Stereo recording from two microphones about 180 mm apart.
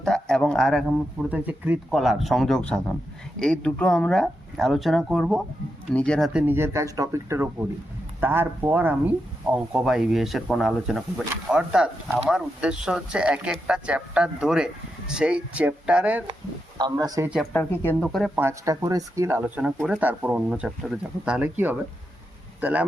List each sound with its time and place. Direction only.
0.0 s speech: 5° left (ahead or behind)
6.4 s speech: 10° right (ahead or behind)
16.7 s speech: 20° right (ahead or behind)
17.2 s speech: 5° right (ahead or behind)
17.5 s speech: 10° left (ahead or behind)
18.3 s speech: 15° right (ahead or behind)